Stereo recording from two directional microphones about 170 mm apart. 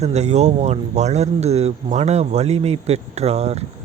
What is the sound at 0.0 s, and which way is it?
Speech, 40° right (ahead or behind).